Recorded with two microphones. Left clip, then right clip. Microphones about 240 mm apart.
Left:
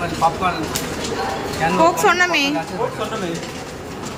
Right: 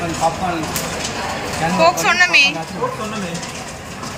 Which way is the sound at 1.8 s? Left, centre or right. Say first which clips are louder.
Right 2 dB; centre.